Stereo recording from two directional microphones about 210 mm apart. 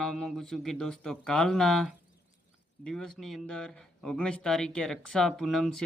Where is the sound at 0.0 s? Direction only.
Centre (ahead or behind).